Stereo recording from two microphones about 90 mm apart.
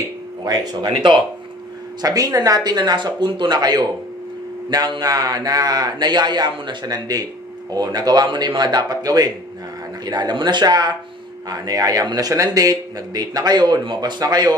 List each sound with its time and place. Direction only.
0.4 s speech: 45° right (ahead or behind)
0.8 s speech: 65° right (ahead or behind)
2.0 s speech: 45° right (ahead or behind)